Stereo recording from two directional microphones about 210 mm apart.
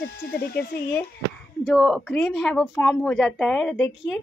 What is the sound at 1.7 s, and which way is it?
A woman's voice, centre (ahead or behind).